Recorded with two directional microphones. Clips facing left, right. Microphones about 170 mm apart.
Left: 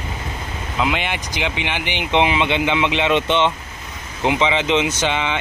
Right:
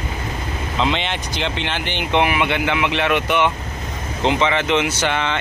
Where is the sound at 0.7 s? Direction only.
5° left (ahead or behind).